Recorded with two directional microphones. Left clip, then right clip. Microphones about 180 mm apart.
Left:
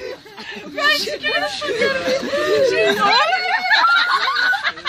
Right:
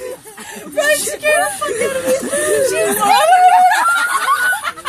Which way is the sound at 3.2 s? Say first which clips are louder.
Right 9 dB; 5° right (ahead or behind).